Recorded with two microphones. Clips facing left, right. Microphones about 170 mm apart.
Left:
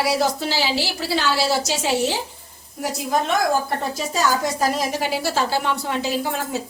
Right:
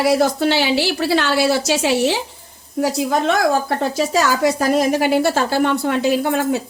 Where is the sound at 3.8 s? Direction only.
90° right.